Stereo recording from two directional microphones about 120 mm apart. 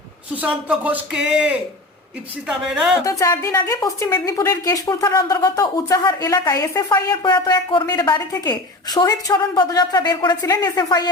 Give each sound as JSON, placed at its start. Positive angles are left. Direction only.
{"t": 0.3, "sound": "speech", "side_deg": -10}
{"t": 3.0, "sound": "a woman's voice", "side_deg": 25}